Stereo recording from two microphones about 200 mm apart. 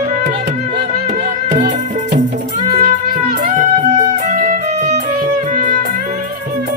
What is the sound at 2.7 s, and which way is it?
Music, 40° right (ahead or behind).